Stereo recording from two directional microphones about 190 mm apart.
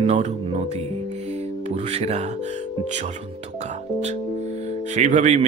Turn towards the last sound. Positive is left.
turn(degrees=-40)  # may be behind; listen again after turning